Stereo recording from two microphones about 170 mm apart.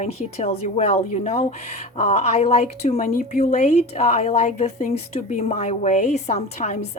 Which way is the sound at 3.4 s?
45° left (ahead or behind).